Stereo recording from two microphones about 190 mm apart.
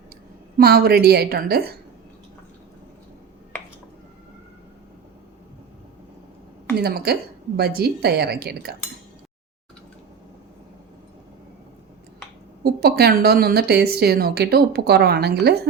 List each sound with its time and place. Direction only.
0.5 s a woman's voice: 55° right (ahead or behind)
6.7 s a woman's voice: 55° right (ahead or behind)
12.6 s a woman's voice: 55° right (ahead or behind)